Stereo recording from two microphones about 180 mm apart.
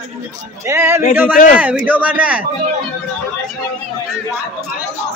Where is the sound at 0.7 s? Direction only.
15° right (ahead or behind).